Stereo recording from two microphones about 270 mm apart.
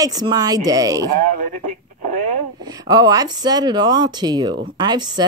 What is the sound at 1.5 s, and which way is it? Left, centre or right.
Speech, right.